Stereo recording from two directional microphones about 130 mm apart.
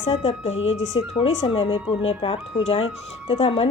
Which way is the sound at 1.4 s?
45° left (ahead or behind).